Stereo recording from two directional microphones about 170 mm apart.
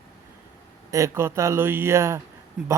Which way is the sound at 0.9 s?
20° right (ahead or behind).